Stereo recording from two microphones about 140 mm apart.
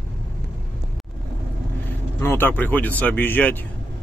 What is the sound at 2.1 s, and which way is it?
Speech, 15° left (ahead or behind).